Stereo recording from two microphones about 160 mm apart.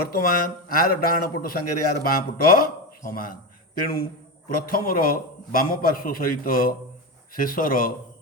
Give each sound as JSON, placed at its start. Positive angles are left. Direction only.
{"t": 0.1, "sound": "a man's voice", "side_deg": 65}